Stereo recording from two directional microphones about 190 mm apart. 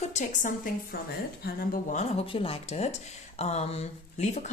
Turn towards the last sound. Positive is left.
turn(degrees=40)  # may be behind; listen again after turning